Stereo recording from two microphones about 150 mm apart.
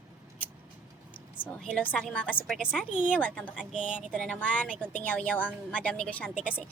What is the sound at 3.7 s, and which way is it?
Speech, 55° right (ahead or behind).